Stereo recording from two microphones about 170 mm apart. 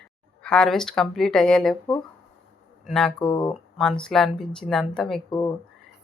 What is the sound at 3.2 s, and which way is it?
Speech, 25° left (ahead or behind).